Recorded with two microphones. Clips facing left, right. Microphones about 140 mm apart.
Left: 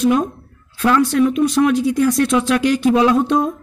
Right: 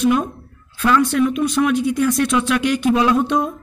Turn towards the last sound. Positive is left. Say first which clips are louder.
# left 2 dB
turn(degrees=35)  # may be behind; listen again after turning